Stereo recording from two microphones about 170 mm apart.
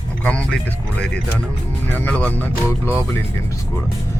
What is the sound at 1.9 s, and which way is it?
Speech, 10° left (ahead or behind).